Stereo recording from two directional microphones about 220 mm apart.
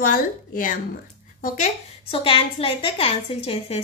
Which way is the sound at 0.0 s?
40° left (ahead or behind).